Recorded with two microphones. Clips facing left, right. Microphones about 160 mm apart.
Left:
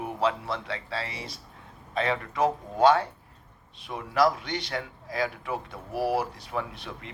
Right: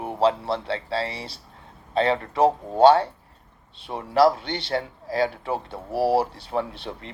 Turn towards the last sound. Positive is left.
turn(degrees=-30)  # may be behind; listen again after turning